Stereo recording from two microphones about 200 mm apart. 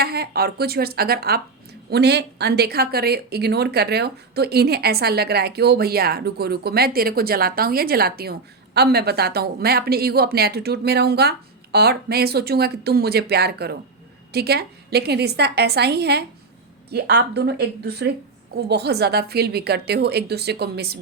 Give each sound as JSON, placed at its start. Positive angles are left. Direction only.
{"t": 0.0, "sound": "a woman's voice", "side_deg": -50}